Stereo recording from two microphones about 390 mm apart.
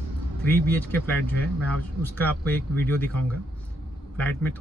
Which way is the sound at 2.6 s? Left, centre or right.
Centre.